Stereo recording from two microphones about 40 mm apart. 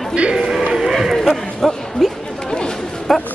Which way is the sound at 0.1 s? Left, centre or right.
Right.